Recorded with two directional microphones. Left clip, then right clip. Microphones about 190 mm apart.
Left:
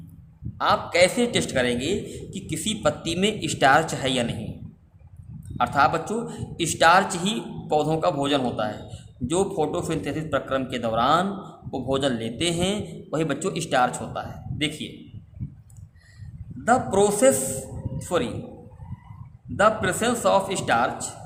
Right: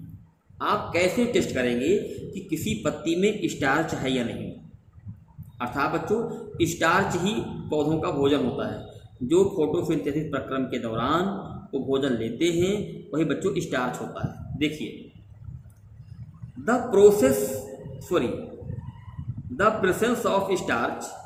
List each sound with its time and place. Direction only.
0.6 s a man's voice: 50° left (ahead or behind)
5.5 s a man's voice: 50° left (ahead or behind)
16.6 s a man's voice: 50° left (ahead or behind)
19.5 s a man's voice: 50° left (ahead or behind)